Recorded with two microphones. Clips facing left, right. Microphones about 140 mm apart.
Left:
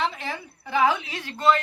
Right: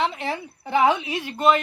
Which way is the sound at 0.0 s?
20° right (ahead or behind).